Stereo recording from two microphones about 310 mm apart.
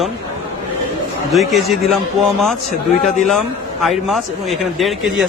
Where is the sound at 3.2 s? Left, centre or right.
Centre.